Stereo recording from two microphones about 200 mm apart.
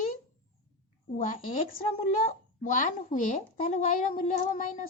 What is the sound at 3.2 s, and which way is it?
Speech, 40° left (ahead or behind).